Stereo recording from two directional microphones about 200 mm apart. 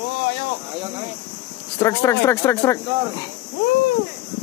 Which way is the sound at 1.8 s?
15° left (ahead or behind).